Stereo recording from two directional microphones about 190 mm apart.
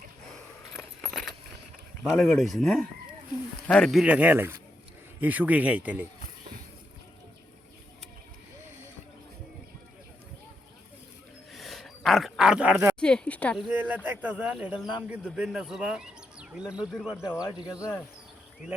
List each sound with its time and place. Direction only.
1.0 s keys jangling: centre (ahead or behind)
2.0 s a man's voice: centre (ahead or behind)
11.5 s a sound: centre (ahead or behind)
13.0 s speech: 5° left (ahead or behind)
17.4 s speech: 20° left (ahead or behind)